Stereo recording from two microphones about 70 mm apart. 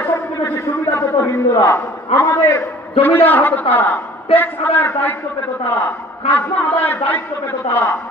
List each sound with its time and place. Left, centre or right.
0.0 s a sound: left
3.0 s a man's voice: left
6.3 s a man's voice: left